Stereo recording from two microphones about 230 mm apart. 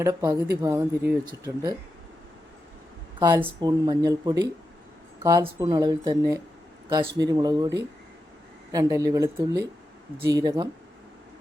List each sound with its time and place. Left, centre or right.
0.0 s speech: centre
3.2 s speech: centre